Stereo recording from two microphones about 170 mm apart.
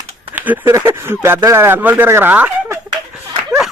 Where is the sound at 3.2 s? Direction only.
20° right (ahead or behind).